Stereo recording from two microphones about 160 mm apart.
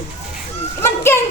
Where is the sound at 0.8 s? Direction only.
15° left (ahead or behind).